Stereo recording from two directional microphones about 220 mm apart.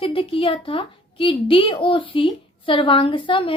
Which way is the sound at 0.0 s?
25° left (ahead or behind).